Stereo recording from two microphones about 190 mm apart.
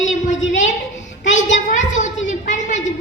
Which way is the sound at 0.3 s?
40° left (ahead or behind).